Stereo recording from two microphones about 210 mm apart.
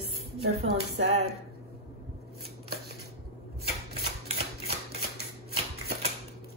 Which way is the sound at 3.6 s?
50° left (ahead or behind).